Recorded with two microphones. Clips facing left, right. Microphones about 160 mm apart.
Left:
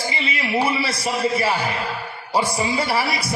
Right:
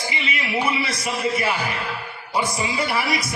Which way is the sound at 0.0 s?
30° left (ahead or behind).